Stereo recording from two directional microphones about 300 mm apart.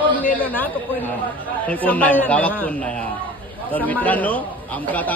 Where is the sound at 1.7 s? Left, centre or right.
Centre.